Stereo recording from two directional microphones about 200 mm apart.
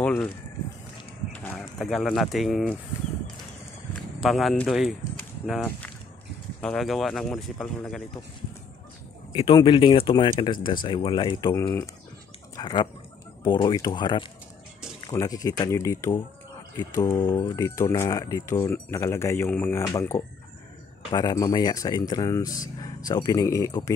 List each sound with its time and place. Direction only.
0.0 s a sound: 5° left (ahead or behind)
1.3 s speech: 10° left (ahead or behind)
4.2 s speech: centre (ahead or behind)
6.6 s speech: centre (ahead or behind)
9.3 s speech: 25° left (ahead or behind)
11.5 s speech: 10° left (ahead or behind)
12.5 s bird: 25° left (ahead or behind)
13.4 s speech: 20° left (ahead or behind)